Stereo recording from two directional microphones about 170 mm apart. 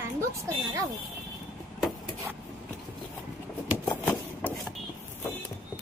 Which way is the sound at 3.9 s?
10° left (ahead or behind).